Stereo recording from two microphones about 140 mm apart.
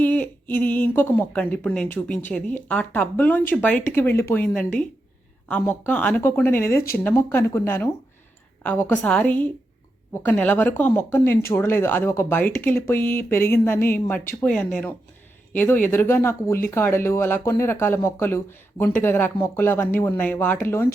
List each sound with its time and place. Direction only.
0.0 s speech: 10° left (ahead or behind)